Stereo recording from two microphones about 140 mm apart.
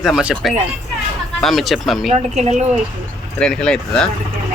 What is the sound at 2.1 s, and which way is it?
Speech, 55° right (ahead or behind).